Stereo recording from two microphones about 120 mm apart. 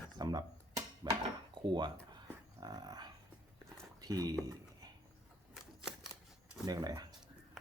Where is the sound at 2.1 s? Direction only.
35° right (ahead or behind).